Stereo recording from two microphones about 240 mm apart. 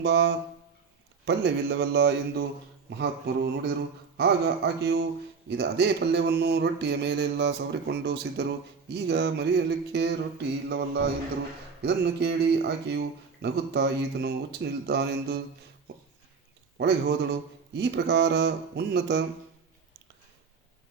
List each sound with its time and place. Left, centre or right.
0.0 s mantra: right
16.7 s a man's voice: right
17.7 s mantra: right